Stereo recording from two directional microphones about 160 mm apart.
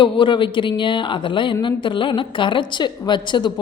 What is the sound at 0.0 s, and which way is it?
A woman's voice, 30° left (ahead or behind).